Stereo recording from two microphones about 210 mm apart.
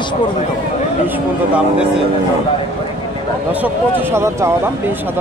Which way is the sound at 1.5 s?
5° right (ahead or behind).